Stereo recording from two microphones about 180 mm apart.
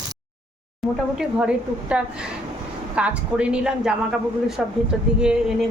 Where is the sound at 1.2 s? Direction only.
5° right (ahead or behind).